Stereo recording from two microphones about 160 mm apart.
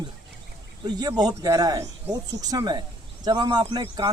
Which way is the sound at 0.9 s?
25° right (ahead or behind).